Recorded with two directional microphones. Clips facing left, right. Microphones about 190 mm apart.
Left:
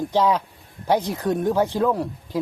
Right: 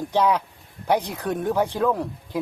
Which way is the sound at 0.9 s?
15° right (ahead or behind).